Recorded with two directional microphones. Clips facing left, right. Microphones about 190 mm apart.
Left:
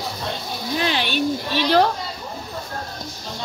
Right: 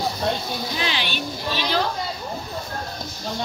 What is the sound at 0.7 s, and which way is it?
A woman's voice, 45° left (ahead or behind).